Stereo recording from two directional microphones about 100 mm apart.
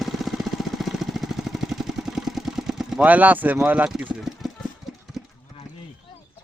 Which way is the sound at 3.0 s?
15° right (ahead or behind).